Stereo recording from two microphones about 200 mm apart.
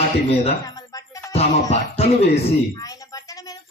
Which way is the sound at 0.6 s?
20° left (ahead or behind).